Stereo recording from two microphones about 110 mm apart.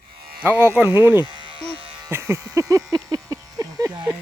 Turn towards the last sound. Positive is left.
turn(degrees=-40)  # may be behind; listen again after turning